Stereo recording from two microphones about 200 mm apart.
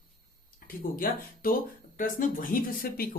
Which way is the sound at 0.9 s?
45° left (ahead or behind).